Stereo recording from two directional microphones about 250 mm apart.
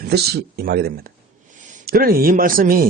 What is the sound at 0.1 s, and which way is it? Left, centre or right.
Speech, right.